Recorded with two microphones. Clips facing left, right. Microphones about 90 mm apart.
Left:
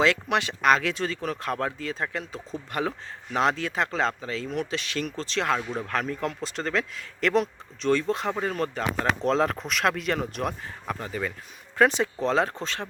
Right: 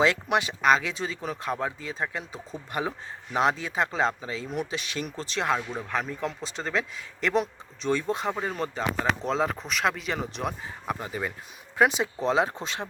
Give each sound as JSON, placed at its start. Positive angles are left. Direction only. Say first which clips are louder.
{"t": 0.0, "sound": "speech", "louder": "even", "side_deg": -15}
{"t": 10.8, "sound": "speech", "louder": "even", "side_deg": -15}